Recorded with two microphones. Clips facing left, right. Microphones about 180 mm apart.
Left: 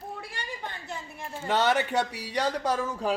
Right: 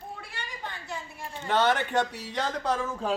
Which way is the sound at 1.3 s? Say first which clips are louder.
Even; 10° left (ahead or behind).